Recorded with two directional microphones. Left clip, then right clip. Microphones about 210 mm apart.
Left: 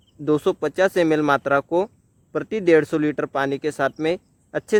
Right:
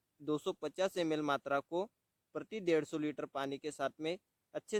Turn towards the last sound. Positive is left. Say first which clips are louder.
# left 17 dB
turn(degrees=-35)  # may be behind; listen again after turning